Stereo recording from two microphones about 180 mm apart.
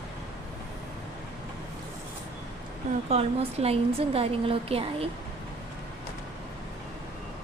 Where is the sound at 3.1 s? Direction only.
35° right (ahead or behind).